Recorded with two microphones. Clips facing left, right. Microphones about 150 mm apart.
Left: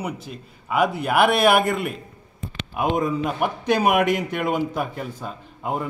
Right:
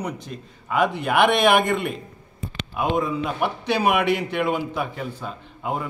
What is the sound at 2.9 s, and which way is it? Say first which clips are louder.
A man's voice: even; 45° left (ahead or behind).